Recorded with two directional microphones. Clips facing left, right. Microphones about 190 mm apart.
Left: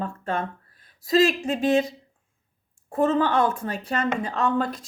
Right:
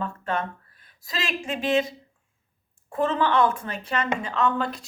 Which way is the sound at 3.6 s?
40° left (ahead or behind).